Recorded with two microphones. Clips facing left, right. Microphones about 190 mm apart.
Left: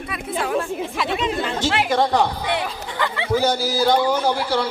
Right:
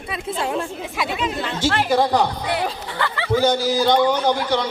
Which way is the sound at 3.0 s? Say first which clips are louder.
Even; 20° left (ahead or behind).